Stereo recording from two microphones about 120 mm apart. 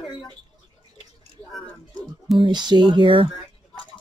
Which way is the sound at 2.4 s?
40° right (ahead or behind).